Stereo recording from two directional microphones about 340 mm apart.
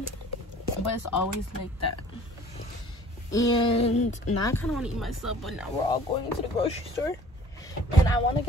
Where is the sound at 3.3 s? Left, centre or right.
Centre.